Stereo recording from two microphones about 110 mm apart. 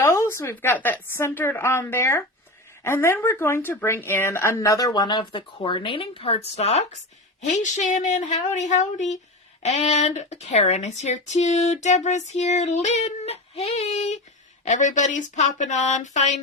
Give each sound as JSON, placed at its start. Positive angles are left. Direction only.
{"t": 0.0, "sound": "a woman's voice", "side_deg": 25}
{"t": 6.6, "sound": "speech", "side_deg": 75}
{"t": 7.4, "sound": "speech", "side_deg": 90}
{"t": 9.6, "sound": "speech", "side_deg": 75}